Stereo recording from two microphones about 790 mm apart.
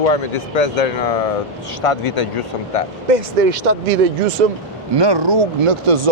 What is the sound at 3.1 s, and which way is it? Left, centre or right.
Speech, right.